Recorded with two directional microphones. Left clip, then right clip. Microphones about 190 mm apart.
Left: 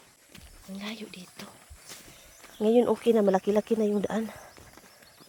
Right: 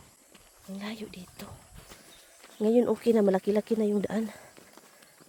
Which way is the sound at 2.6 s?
5° right (ahead or behind).